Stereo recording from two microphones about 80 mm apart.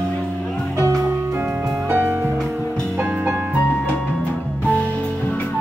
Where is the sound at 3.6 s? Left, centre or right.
Centre.